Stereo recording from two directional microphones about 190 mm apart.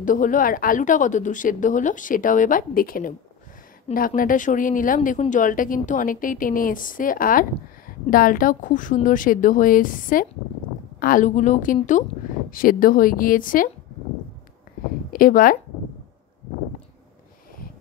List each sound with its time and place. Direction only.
0.0 s speech: 45° left (ahead or behind)
15.1 s speech: 45° left (ahead or behind)